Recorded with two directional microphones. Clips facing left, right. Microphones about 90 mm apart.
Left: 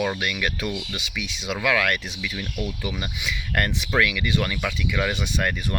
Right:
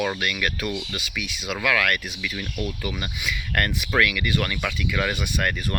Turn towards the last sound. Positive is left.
turn(degrees=15)  # may be behind; listen again after turning